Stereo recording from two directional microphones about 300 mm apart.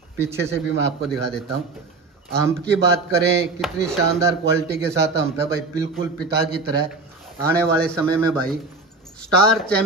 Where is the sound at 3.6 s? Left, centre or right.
Centre.